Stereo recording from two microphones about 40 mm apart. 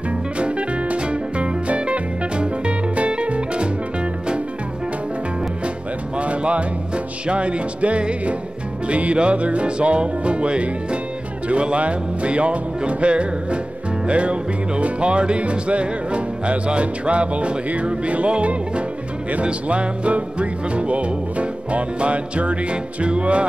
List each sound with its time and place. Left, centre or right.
0.4 s music: right
6.1 s music: right